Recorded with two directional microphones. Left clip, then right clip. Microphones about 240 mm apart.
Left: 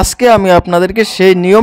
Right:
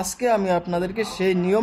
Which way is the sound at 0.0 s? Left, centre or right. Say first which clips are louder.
Left 13 dB; left.